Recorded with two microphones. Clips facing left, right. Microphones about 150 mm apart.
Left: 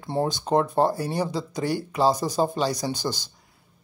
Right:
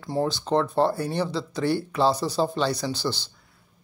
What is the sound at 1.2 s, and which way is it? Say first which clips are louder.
Speech: right 1 dB; 45° left (ahead or behind).